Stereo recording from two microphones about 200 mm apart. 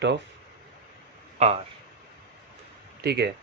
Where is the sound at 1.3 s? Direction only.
35° right (ahead or behind).